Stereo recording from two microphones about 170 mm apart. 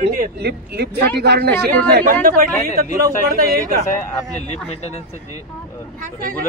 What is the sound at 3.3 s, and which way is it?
Speech, 55° right (ahead or behind).